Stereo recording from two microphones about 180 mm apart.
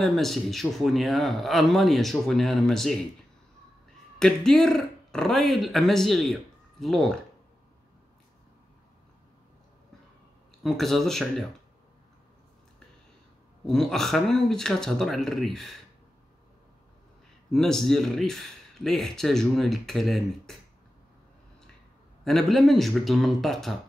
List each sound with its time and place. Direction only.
0.0 s speech: centre (ahead or behind)
4.2 s speech: centre (ahead or behind)
10.6 s speech: centre (ahead or behind)
13.7 s speech: centre (ahead or behind)
17.5 s speech: centre (ahead or behind)
22.2 s speech: centre (ahead or behind)